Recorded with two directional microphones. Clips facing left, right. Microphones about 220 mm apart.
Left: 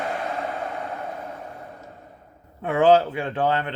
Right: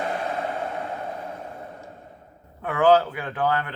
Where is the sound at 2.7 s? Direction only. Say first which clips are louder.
Left 1 dB; 25° left (ahead or behind).